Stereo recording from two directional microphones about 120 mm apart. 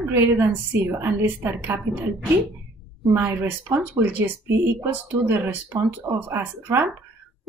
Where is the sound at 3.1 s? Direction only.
20° right (ahead or behind).